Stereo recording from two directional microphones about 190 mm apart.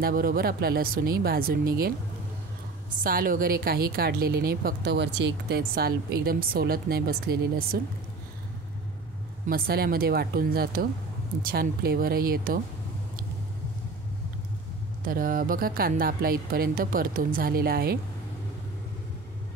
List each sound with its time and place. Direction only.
0.0 s a woman's voice: 50° right (ahead or behind)
3.0 s a woman's voice: 50° right (ahead or behind)
9.5 s a woman's voice: 50° right (ahead or behind)
15.0 s a woman's voice: 50° right (ahead or behind)